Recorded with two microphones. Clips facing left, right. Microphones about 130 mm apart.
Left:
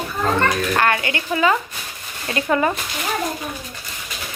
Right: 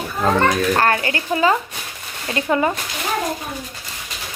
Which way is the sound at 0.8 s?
35° right (ahead or behind).